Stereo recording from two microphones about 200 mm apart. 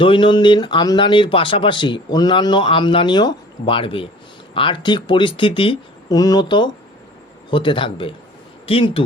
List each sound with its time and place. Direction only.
0.0 s speech: 25° left (ahead or behind)